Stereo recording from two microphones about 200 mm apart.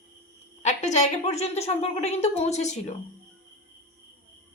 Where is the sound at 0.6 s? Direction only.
35° left (ahead or behind).